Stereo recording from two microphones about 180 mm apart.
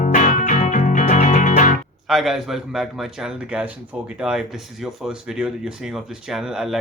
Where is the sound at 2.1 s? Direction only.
Centre (ahead or behind).